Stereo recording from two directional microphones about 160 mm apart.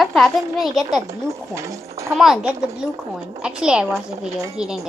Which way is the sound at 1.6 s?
20° right (ahead or behind).